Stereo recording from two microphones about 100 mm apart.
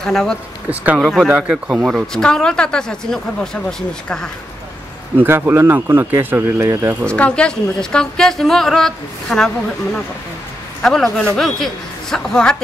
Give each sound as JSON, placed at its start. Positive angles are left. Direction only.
{"t": 0.0, "sound": "a woman's voice", "side_deg": 5}
{"t": 1.3, "sound": "speech", "side_deg": -10}
{"t": 2.1, "sound": "a woman's voice", "side_deg": 5}
{"t": 5.1, "sound": "speech", "side_deg": -25}
{"t": 7.1, "sound": "a woman's voice", "side_deg": 10}
{"t": 10.8, "sound": "a woman's voice", "side_deg": 5}